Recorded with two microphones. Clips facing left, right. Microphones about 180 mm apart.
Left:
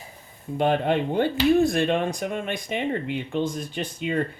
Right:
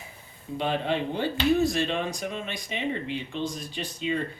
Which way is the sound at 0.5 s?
50° left (ahead or behind).